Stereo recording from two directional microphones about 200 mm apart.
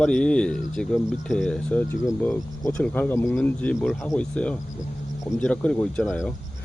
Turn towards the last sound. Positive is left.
turn(degrees=0)  # may be behind; listen again after turning